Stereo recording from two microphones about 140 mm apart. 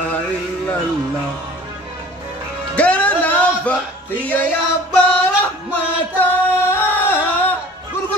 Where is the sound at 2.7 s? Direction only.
10° left (ahead or behind).